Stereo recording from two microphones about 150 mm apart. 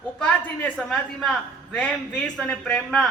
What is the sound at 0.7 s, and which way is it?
A woman's voice, 5° left (ahead or behind).